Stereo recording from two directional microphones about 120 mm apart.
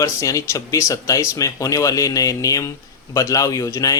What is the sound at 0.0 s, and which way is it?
Speech, 25° left (ahead or behind).